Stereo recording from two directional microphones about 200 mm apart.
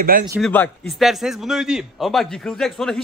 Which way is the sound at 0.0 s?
45° right (ahead or behind).